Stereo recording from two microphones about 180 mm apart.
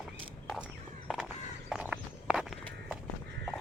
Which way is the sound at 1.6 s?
5° right (ahead or behind).